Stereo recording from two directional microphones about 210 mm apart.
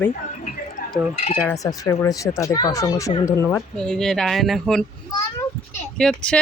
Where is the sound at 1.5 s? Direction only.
15° left (ahead or behind).